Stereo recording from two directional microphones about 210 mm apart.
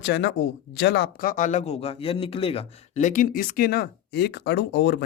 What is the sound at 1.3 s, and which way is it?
Speech, 35° left (ahead or behind).